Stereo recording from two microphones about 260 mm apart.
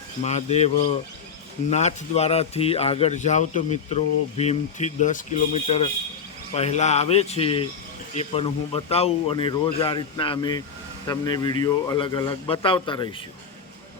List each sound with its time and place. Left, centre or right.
0.2 s speech: left